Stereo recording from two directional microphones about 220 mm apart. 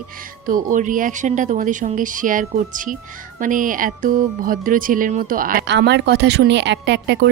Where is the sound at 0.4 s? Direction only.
35° right (ahead or behind).